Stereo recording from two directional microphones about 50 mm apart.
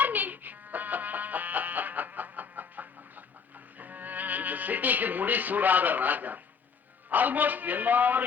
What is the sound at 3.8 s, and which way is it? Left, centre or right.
A man's voice, right.